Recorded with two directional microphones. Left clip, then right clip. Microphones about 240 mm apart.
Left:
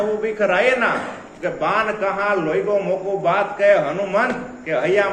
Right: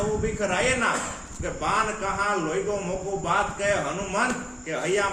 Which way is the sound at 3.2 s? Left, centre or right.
Centre.